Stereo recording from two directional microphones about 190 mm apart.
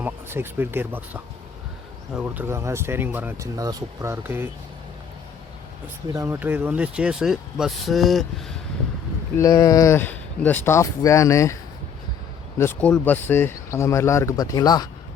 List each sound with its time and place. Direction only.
0.0 s speech: 10° right (ahead or behind)
6.1 s speech: 10° right (ahead or behind)
9.4 s speech: 20° left (ahead or behind)
12.5 s speech: 10° left (ahead or behind)